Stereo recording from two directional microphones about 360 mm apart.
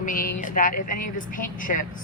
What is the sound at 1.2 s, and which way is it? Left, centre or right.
Speech, left.